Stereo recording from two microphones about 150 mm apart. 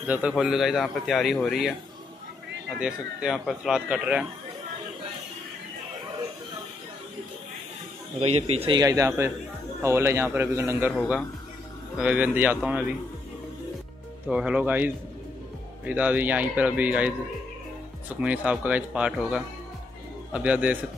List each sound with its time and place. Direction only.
0.0 s speech: 10° right (ahead or behind)
2.8 s speech: 5° right (ahead or behind)
8.2 s speech: 45° right (ahead or behind)
8.7 s a man's voice: 25° right (ahead or behind)
12.0 s speech: 10° right (ahead or behind)
14.3 s speech: 5° right (ahead or behind)
18.2 s speech: 10° right (ahead or behind)